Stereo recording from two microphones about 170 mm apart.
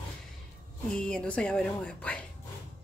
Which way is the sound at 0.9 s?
5° left (ahead or behind).